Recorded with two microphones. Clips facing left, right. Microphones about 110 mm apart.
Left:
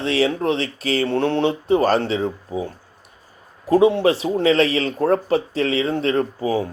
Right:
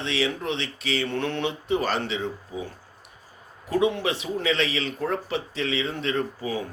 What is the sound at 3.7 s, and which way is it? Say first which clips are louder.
Speech: left 9 dB; 35° left (ahead or behind).